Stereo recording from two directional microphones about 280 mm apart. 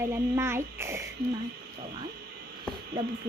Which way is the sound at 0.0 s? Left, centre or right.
Centre.